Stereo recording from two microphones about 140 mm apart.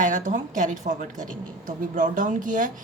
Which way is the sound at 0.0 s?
65° right (ahead or behind).